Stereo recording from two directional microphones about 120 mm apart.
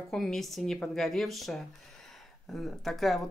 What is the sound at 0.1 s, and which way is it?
Speech, 5° left (ahead or behind).